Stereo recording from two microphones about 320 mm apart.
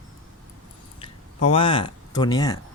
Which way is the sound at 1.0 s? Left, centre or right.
Centre.